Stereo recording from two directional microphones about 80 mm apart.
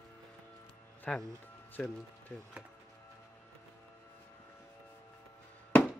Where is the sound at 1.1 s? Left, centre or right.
Centre.